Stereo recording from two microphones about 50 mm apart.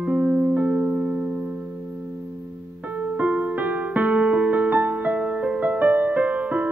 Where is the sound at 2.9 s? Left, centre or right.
Right.